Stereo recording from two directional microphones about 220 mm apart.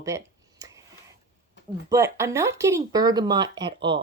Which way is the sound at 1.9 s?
15° right (ahead or behind).